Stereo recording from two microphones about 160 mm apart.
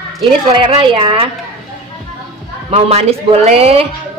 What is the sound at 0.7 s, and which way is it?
Speech, 35° right (ahead or behind).